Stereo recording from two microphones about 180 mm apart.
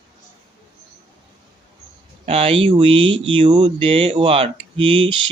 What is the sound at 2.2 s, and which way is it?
Speech, 35° right (ahead or behind).